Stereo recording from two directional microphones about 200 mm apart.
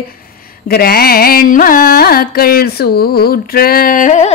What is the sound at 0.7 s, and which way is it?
Carnatic music, 50° left (ahead or behind).